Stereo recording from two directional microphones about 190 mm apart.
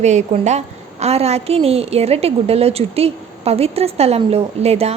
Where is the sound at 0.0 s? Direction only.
40° right (ahead or behind).